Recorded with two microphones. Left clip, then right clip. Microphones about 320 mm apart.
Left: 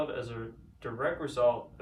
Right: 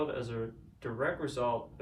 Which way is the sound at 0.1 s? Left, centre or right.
Centre.